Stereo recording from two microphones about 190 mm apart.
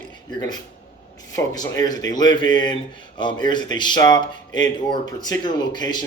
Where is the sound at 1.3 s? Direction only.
15° left (ahead or behind).